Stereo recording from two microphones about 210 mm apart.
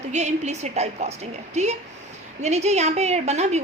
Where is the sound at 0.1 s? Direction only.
35° right (ahead or behind).